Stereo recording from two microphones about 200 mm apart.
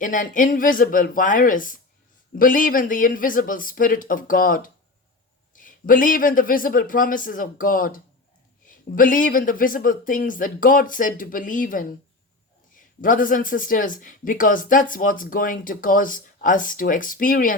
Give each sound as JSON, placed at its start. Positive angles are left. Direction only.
{"t": 0.0, "sound": "speech", "side_deg": 40}